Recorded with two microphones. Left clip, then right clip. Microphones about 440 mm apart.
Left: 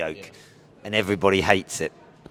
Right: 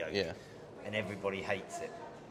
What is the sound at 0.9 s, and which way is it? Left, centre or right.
Speech, left.